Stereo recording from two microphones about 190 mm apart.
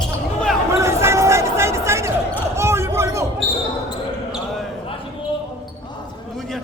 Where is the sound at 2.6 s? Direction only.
15° right (ahead or behind).